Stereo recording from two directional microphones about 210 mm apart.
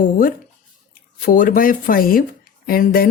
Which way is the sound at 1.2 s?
40° left (ahead or behind).